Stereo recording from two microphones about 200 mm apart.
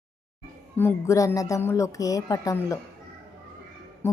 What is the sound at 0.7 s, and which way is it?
A woman's voice, 15° left (ahead or behind).